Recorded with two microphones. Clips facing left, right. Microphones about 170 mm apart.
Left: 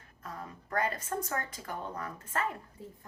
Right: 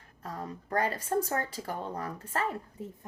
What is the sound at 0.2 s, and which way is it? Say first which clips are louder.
A woman's voice: right 5 dB; 35° right (ahead or behind).